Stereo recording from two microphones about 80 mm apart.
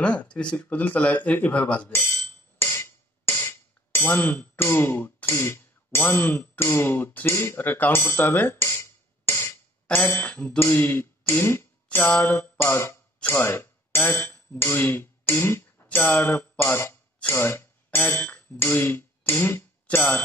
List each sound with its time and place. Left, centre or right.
0.0 s speech: centre
2.6 s hammer: left
3.9 s speech: left
9.9 s music: left
10.6 s speech: left
12.1 s music: left
13.3 s speech: left
14.6 s music: left
16.1 s speech: left